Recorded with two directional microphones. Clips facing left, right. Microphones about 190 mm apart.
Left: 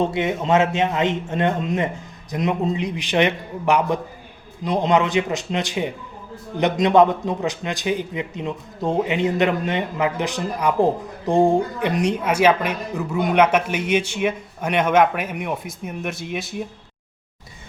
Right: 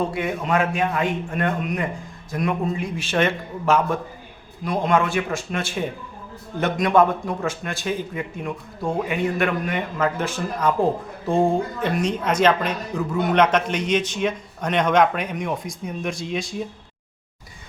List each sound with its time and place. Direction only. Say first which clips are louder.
0.0 s a man's voice: left 3 dB; 20° left (ahead or behind); by 16.6 s 5° left (ahead or behind)